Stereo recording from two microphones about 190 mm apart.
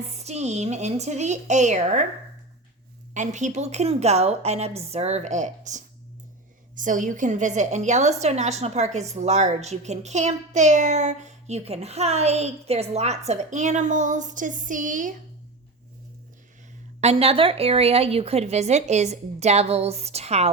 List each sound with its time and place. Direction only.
0.2 s a woman's voice: 35° right (ahead or behind)
3.2 s a woman's voice: 40° right (ahead or behind)
17.0 s a woman's voice: 35° right (ahead or behind)